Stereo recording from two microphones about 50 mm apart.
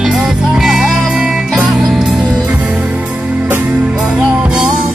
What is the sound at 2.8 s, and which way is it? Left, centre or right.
Music, right.